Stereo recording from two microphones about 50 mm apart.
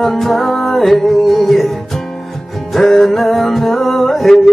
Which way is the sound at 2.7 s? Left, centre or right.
Centre.